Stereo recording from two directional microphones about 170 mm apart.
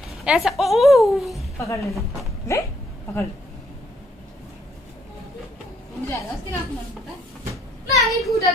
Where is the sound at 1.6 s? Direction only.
20° left (ahead or behind).